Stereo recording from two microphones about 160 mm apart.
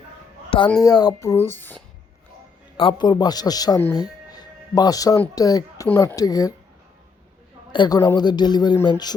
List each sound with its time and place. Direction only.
0.8 s speech: 25° left (ahead or behind)
2.7 s speech: 30° left (ahead or behind)
3.9 s music: 25° left (ahead or behind)
5.3 s speech: 25° left (ahead or behind)
7.7 s speech: 25° left (ahead or behind)